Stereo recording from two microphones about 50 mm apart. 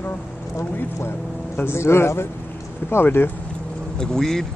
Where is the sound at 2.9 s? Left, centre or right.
Left.